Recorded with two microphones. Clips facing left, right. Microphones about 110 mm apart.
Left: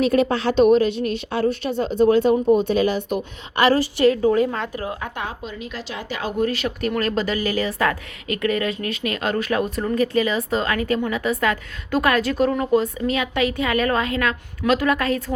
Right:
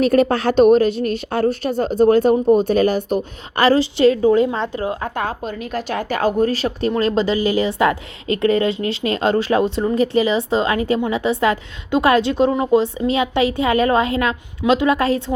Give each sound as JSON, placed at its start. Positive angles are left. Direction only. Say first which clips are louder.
{"t": 0.0, "sound": "speech", "louder": "right 3 dB", "side_deg": -45}
{"t": 3.8, "sound": "a woman's voice", "louder": "right 3 dB", "side_deg": -25}